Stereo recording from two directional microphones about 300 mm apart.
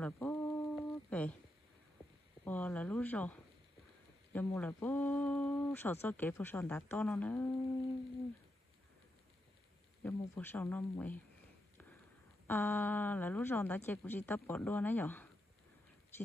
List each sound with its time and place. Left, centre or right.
0.0 s a sound: centre
2.4 s speech: centre
10.0 s speech: centre
12.4 s speech: centre